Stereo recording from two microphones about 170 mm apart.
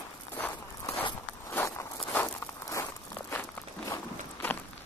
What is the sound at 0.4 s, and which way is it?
Walk, 10° left (ahead or behind).